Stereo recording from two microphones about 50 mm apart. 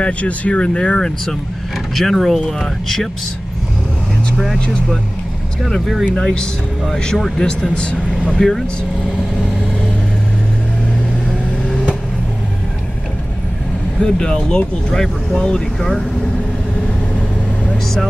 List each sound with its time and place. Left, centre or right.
0.0 s speech: left; by 3.1 s centre
5.6 s speech: centre
6.1 s speech: centre
7.4 s speech: centre
8.4 s speech: centre
14.0 s speech: centre